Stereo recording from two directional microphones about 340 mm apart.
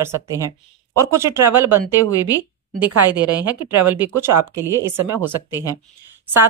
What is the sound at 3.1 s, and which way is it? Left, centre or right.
A woman's voice, centre.